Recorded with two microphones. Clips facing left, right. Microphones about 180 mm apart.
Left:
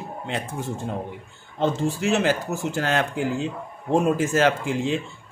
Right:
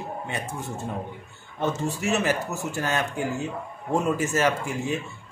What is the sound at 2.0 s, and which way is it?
Speech, 90° left.